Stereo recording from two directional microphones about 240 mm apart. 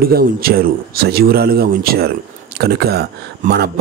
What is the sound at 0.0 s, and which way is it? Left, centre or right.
Speech, right.